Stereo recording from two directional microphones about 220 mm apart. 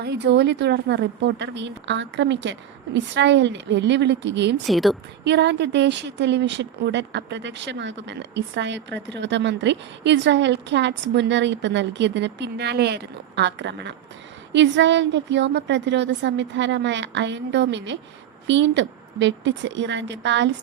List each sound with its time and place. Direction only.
0.0 s a woman's voice: 50° right (ahead or behind)
4.6 s a woman's voice: centre (ahead or behind)
5.2 s a woman's voice: 50° right (ahead or behind)